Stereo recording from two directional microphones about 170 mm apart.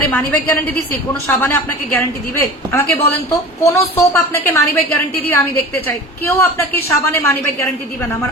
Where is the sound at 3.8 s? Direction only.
15° left (ahead or behind).